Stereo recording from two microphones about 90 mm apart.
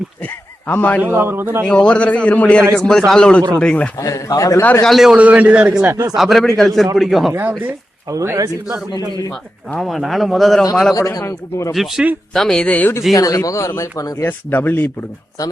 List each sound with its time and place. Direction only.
0.7 s speech: 20° left (ahead or behind)
1.0 s a man's voice: 25° right (ahead or behind)
1.6 s a man's voice: 10° left (ahead or behind)
4.0 s a man's voice: 35° left (ahead or behind)
4.8 s a man's voice: centre (ahead or behind)
5.1 s a man's voice: 15° right (ahead or behind)
6.1 s a man's voice: centre (ahead or behind)
7.3 s a man's voice: 20° right (ahead or behind)
8.1 s speech: 35° right (ahead or behind)
9.7 s a man's voice: centre (ahead or behind)
10.9 s a man's voice: 40° left (ahead or behind)
11.7 s a man's voice: centre (ahead or behind); by 12.9 s 15° left (ahead or behind)
13.1 s a man's voice: 40° left (ahead or behind)
14.3 s speech: 20° left (ahead or behind)